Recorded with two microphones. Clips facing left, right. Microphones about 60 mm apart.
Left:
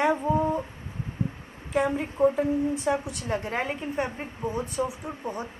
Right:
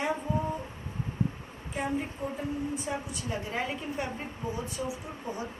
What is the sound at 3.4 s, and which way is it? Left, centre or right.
A woman's voice, left.